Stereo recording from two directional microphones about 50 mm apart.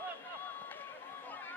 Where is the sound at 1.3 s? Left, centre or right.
Left.